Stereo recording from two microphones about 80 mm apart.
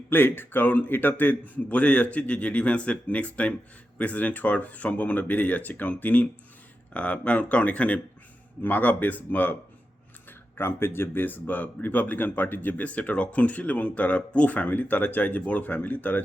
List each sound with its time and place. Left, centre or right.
0.1 s a man's voice: left
10.6 s speech: left